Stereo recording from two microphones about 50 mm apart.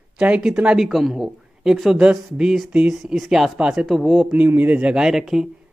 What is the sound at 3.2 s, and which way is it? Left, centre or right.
Speech, centre.